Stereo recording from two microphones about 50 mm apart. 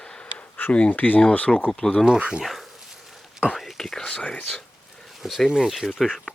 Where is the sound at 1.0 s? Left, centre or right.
Left.